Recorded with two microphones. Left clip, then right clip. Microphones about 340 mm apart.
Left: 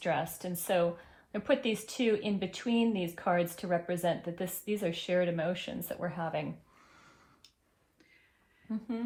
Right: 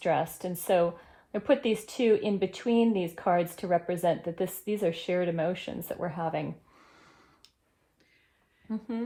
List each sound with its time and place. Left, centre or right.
0.0 s speech: right
6.9 s a sound: right
8.7 s speech: right